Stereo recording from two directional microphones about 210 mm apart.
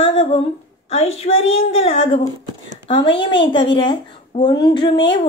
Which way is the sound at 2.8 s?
25° left (ahead or behind).